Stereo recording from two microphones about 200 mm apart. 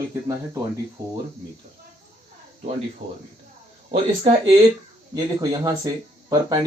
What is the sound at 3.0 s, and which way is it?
Speech, 35° right (ahead or behind).